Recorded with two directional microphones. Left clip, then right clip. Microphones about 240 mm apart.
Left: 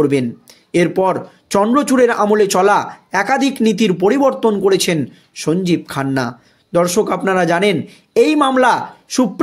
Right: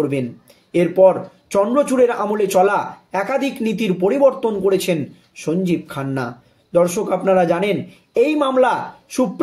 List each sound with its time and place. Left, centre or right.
0.7 s speech: left